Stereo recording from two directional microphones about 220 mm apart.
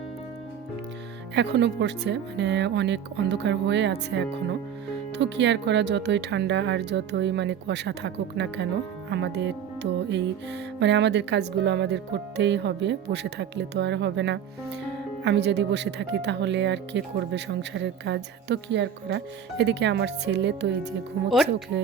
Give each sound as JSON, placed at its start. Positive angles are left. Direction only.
{"t": 1.4, "sound": "speech", "side_deg": -50}